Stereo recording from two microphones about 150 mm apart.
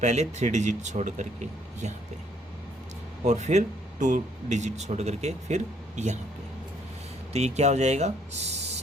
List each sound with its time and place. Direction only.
0.0 s speech: 50° right (ahead or behind)
3.2 s speech: 50° right (ahead or behind)
7.3 s speech: 45° right (ahead or behind)